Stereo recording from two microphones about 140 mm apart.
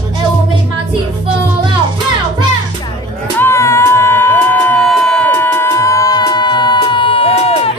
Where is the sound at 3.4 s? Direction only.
20° left (ahead or behind).